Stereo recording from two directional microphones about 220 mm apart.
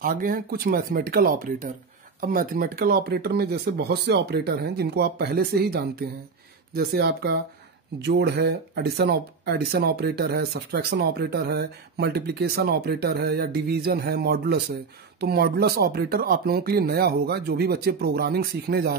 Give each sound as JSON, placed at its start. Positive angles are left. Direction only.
{"t": 0.0, "sound": "speech", "side_deg": -40}